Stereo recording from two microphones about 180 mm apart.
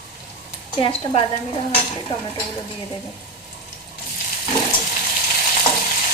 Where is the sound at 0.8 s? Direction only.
30° left (ahead or behind).